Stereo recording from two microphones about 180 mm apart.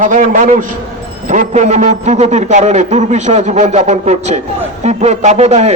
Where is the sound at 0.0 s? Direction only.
45° right (ahead or behind).